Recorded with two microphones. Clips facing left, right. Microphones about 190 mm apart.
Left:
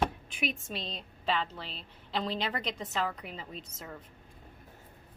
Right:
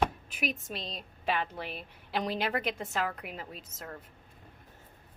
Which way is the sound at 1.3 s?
10° right (ahead or behind).